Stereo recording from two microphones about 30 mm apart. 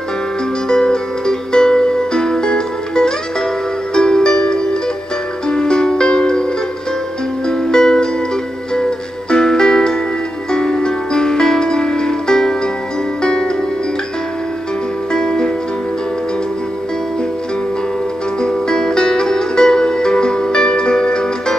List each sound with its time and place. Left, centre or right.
0.7 s music: left
7.4 s music: centre
9.3 s music: left
15.1 s music: centre
18.4 s music: left